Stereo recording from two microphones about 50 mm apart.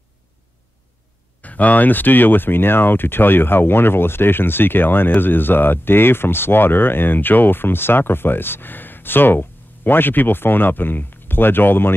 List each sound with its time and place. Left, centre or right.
1.4 s speech: left